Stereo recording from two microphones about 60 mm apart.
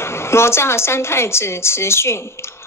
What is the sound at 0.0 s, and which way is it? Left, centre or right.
A woman's voice, left.